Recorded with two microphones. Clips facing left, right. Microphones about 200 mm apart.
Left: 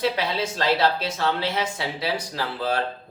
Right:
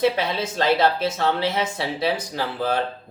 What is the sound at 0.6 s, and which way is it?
Speech, 20° right (ahead or behind).